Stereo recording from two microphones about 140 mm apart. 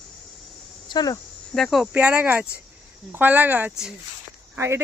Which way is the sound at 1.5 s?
Centre (ahead or behind).